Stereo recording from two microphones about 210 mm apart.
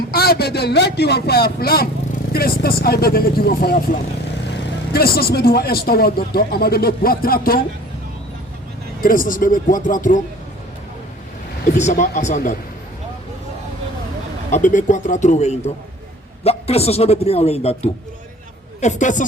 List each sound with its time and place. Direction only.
0.1 s speech: 45° left (ahead or behind)
9.0 s speech: 40° left (ahead or behind)
11.8 s speech: 35° left (ahead or behind)
14.5 s speech: 35° left (ahead or behind)
18.8 s speech: 35° left (ahead or behind)